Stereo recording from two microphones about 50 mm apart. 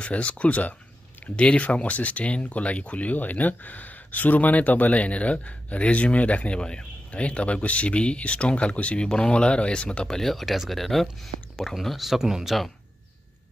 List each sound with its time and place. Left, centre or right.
0.0 s speech: left
10.0 s speech: centre